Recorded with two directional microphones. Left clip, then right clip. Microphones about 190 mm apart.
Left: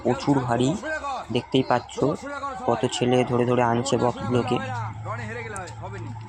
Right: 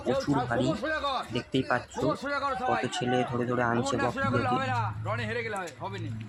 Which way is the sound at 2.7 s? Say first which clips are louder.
Left 5 dB; 15° left (ahead or behind).